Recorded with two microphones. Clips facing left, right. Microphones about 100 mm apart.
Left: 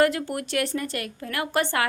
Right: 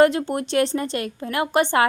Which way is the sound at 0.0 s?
25° right (ahead or behind).